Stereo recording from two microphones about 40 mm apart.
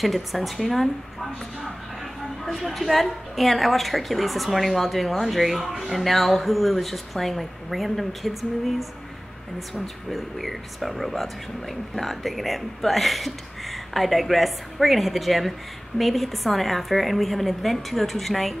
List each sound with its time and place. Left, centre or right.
0.0 s speech: centre
2.4 s speech: centre